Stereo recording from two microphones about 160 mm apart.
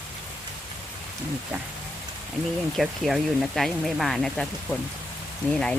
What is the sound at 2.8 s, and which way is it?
Speech, centre (ahead or behind).